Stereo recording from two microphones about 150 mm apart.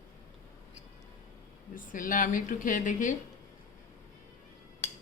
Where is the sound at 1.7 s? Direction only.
65° left (ahead or behind).